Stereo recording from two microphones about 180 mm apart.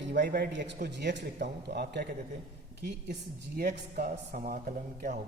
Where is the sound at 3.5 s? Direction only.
50° right (ahead or behind).